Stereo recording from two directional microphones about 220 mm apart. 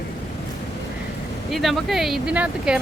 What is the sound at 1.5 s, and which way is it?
Speech, centre (ahead or behind).